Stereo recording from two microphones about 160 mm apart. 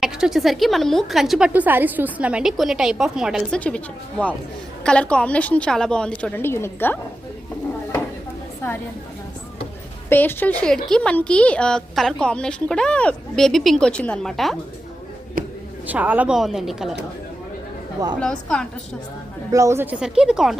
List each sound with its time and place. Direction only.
0.0 s a woman's voice: centre (ahead or behind)
4.8 s a woman's voice: 5° left (ahead or behind)
10.1 s a woman's voice: 10° left (ahead or behind)
15.4 s a sound: 60° right (ahead or behind)
15.9 s a woman's voice: 10° right (ahead or behind)
18.2 s a woman's voice: 5° left (ahead or behind)
19.5 s a woman's voice: 20° right (ahead or behind); by 20.6 s 5° right (ahead or behind)